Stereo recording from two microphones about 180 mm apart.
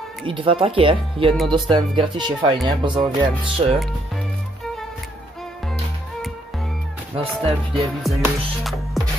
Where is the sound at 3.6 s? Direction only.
35° right (ahead or behind).